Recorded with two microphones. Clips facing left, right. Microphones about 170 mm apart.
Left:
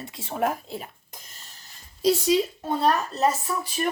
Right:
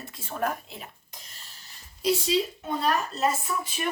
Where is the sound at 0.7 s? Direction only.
45° left (ahead or behind).